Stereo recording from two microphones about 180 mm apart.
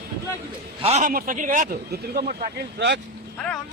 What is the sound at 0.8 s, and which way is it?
Speech, 40° right (ahead or behind).